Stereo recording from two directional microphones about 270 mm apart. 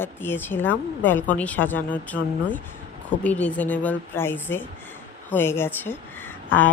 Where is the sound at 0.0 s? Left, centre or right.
Centre.